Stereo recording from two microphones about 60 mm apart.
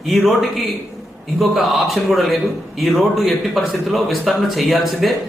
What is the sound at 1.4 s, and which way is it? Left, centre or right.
Speech, centre.